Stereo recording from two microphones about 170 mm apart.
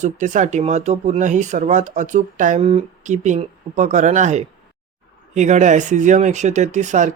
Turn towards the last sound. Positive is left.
turn(degrees=-45)  # may be behind; listen again after turning